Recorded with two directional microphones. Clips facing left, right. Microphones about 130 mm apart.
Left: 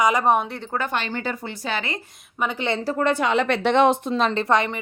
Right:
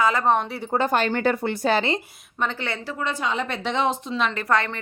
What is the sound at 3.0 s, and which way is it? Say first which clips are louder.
A woman's voice: left 5 dB; 60° left (ahead or behind).